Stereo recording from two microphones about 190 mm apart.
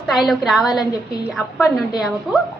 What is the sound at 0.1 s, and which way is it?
A woman's voice, centre (ahead or behind).